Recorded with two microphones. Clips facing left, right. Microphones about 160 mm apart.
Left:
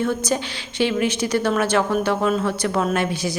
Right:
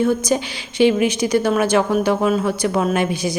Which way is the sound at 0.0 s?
15° right (ahead or behind).